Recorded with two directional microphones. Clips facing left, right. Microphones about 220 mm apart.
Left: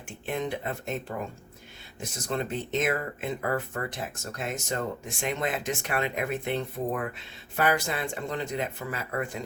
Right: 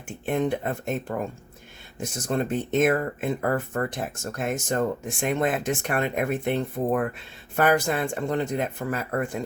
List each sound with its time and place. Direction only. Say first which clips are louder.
0.3 s speech: right 6 dB; 50° right (ahead or behind)